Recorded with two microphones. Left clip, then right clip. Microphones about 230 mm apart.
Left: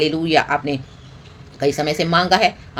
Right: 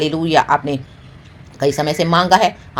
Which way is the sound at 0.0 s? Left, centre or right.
Centre.